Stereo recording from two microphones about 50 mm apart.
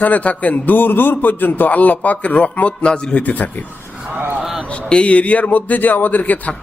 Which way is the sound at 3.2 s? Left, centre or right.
Left.